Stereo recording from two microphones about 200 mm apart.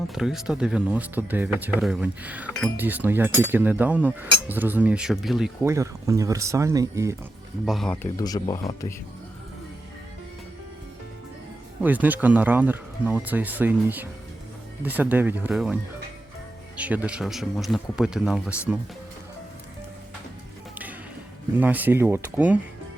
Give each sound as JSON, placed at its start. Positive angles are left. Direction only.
{"t": 0.1, "sound": "speech", "side_deg": 0}
{"t": 5.6, "sound": "speech", "side_deg": -15}
{"t": 7.6, "sound": "speech", "side_deg": 0}
{"t": 8.1, "sound": "speech", "side_deg": 20}
{"t": 11.8, "sound": "speech", "side_deg": -10}
{"t": 21.5, "sound": "speech", "side_deg": -10}